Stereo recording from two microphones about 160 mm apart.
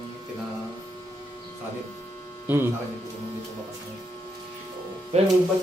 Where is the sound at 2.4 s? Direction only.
15° right (ahead or behind).